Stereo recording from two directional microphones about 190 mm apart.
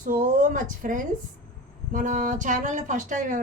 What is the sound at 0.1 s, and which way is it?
Speech, 45° right (ahead or behind).